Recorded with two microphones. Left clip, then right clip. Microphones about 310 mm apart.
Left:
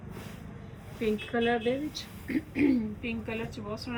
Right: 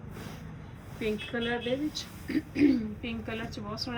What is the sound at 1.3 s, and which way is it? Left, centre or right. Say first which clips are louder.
A woman's voice: left 5 dB; centre.